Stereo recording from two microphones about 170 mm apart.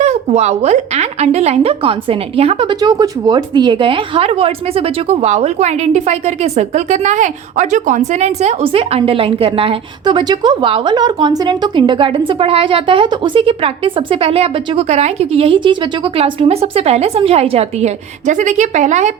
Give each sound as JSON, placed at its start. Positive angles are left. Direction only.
{"t": 0.0, "sound": "a woman's voice", "side_deg": -40}